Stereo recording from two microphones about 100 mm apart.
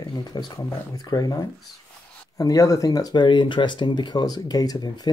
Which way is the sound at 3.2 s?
55° left (ahead or behind).